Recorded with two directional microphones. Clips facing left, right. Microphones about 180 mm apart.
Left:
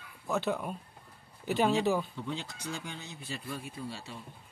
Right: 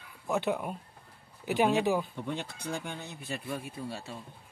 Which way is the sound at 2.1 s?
60° right (ahead or behind).